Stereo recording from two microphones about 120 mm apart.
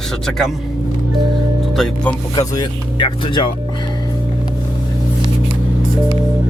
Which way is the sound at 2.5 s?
40° left (ahead or behind).